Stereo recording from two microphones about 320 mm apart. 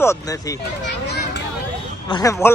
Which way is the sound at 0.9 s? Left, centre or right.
Left.